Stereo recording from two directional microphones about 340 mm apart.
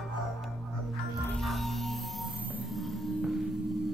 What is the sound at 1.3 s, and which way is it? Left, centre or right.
Music, centre.